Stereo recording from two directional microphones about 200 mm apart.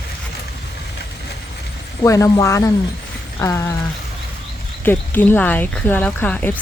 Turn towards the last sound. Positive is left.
turn(degrees=5)  # may be behind; listen again after turning